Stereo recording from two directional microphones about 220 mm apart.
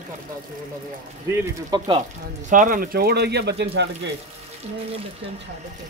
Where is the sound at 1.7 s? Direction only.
20° right (ahead or behind).